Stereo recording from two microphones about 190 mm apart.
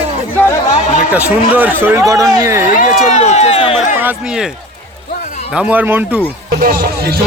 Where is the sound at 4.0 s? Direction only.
5° right (ahead or behind).